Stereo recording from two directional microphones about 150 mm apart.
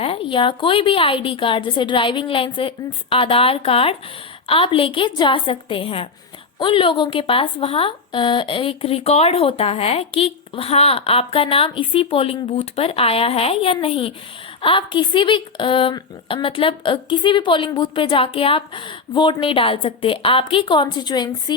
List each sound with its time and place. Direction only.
0.0 s speech: 35° left (ahead or behind)